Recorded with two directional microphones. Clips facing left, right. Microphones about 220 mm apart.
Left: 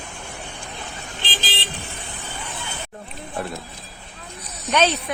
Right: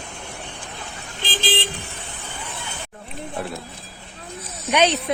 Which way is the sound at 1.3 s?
50° right (ahead or behind).